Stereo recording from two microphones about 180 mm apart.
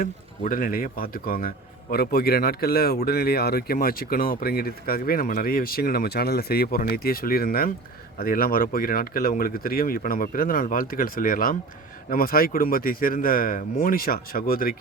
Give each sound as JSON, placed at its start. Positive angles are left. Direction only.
{"t": 0.0, "sound": "speech", "side_deg": 50}